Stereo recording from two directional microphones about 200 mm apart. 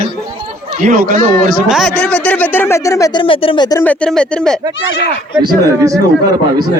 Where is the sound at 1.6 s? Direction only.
Centre (ahead or behind); by 3.8 s 20° left (ahead or behind).